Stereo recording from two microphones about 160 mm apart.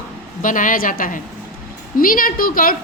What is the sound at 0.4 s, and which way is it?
A woman's voice, 55° left (ahead or behind).